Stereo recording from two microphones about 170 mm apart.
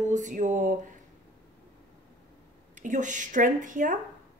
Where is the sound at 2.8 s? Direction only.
45° right (ahead or behind).